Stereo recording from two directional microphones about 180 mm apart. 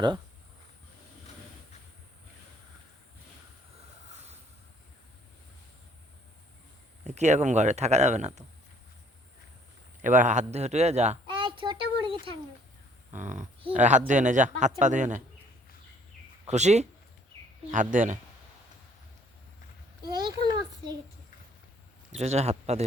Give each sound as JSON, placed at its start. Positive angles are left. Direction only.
{"t": 4.1, "sound": "boat", "side_deg": -35}
{"t": 7.0, "sound": "speech", "side_deg": -40}
{"t": 10.0, "sound": "speech", "side_deg": -45}
{"t": 13.1, "sound": "speech", "side_deg": -45}
{"t": 16.5, "sound": "speech", "side_deg": -40}
{"t": 20.2, "sound": "a sound", "side_deg": -25}
{"t": 22.1, "sound": "speech", "side_deg": -35}